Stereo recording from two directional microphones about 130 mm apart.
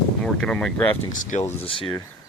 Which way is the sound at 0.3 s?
5° left (ahead or behind).